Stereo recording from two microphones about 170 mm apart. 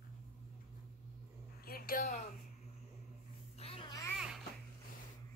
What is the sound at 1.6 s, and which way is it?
Speech, 60° left (ahead or behind).